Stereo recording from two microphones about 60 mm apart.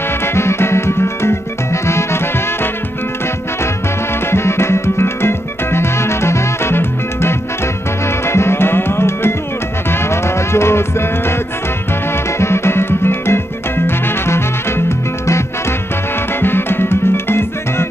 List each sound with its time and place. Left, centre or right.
0.2 s music: left
4.3 s music: left
16.3 s music: left